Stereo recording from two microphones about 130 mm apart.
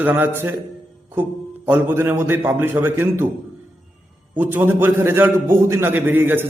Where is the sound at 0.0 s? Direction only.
15° right (ahead or behind).